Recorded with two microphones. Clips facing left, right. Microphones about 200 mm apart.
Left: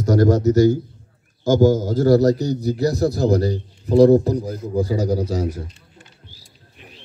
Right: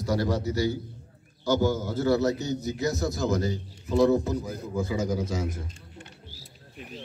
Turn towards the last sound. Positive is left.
turn(degrees=35)  # may be behind; listen again after turning